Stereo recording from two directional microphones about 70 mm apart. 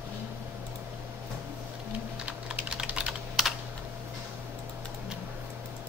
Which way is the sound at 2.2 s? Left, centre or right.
Centre.